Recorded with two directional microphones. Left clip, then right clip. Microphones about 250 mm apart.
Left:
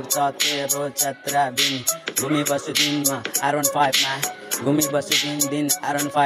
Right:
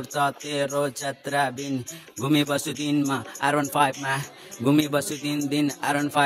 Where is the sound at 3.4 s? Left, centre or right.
Centre.